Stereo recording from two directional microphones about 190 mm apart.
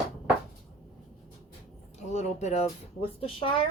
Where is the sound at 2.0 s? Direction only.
35° left (ahead or behind).